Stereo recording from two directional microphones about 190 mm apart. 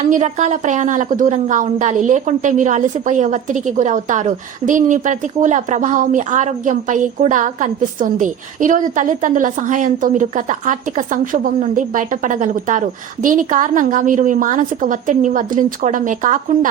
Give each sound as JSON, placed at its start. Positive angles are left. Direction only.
{"t": 0.1, "sound": "a woman's voice", "side_deg": -40}